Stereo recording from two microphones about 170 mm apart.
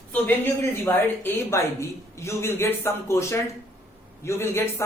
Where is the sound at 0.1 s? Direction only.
10° left (ahead or behind).